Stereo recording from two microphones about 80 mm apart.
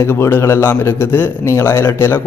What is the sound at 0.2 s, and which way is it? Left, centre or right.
A man's voice, left.